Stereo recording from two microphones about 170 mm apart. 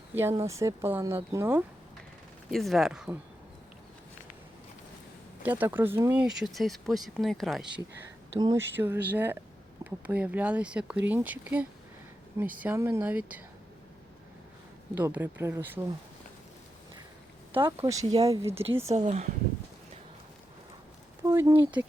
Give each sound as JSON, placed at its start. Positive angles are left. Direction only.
{"t": 0.1, "sound": "speech", "side_deg": -15}
{"t": 2.5, "sound": "speech", "side_deg": 0}
{"t": 5.4, "sound": "speech", "side_deg": -10}
{"t": 8.4, "sound": "speech", "side_deg": -25}
{"t": 8.6, "sound": "speech", "side_deg": -10}
{"t": 14.9, "sound": "speech", "side_deg": -10}
{"t": 17.5, "sound": "speech", "side_deg": -15}
{"t": 18.9, "sound": "speech", "side_deg": -45}
{"t": 21.2, "sound": "speech", "side_deg": -15}